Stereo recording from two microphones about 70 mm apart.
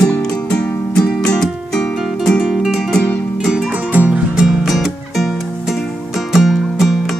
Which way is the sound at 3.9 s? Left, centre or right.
Right.